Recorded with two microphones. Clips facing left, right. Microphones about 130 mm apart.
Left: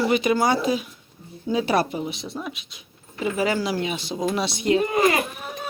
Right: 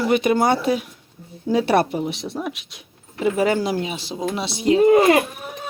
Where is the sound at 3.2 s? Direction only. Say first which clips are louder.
Right 4 dB; 55° right (ahead or behind).